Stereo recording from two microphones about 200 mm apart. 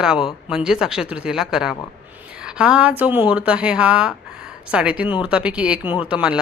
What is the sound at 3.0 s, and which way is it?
A woman's voice, 10° right (ahead or behind).